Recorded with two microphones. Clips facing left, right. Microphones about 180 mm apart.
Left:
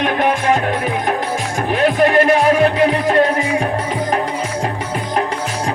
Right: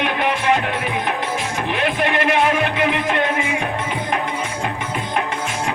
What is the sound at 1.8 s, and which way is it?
Music, 40° left (ahead or behind).